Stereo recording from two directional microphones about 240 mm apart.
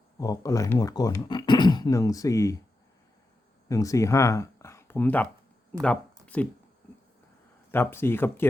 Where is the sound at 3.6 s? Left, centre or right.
Centre.